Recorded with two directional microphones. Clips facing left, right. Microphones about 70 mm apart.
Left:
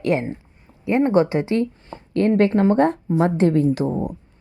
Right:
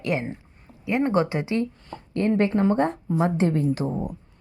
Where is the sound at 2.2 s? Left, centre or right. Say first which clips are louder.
Left 5 dB; left.